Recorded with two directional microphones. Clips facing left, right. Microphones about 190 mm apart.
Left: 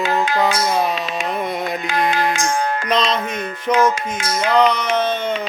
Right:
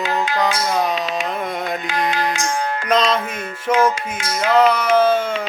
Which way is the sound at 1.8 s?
50° left (ahead or behind).